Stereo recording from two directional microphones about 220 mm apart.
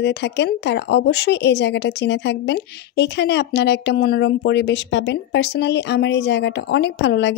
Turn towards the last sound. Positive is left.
turn(degrees=50)  # may be behind; listen again after turning